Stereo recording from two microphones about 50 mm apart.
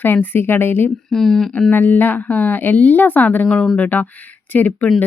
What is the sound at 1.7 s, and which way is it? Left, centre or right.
Speech, left.